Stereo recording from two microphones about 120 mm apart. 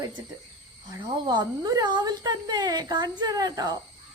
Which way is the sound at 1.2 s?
35° right (ahead or behind).